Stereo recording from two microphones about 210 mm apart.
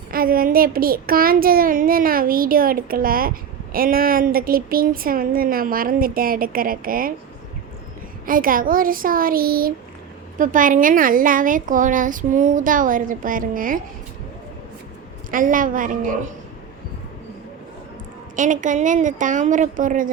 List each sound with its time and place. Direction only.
0.1 s a child's voice: 45° right (ahead or behind)
8.3 s a child's voice: 40° right (ahead or behind)
15.3 s a woman's voice: 40° right (ahead or behind)
18.3 s a woman's voice: 35° right (ahead or behind)